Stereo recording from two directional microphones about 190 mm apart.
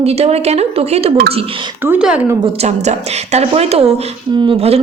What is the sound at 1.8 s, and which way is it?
Speech, 5° right (ahead or behind).